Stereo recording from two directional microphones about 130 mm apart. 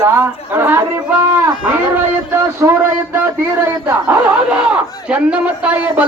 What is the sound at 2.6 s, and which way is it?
A man's voice, 20° right (ahead or behind).